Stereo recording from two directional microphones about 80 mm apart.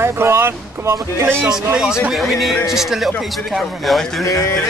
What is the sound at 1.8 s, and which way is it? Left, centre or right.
Speech, centre.